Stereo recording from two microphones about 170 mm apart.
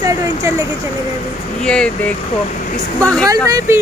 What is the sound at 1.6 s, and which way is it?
Speech, 5° left (ahead or behind).